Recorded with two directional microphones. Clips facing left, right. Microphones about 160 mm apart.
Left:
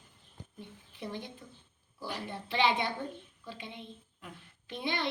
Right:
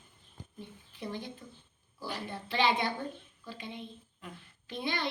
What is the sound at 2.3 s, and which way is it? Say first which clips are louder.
Speech: even; 20° left (ahead or behind).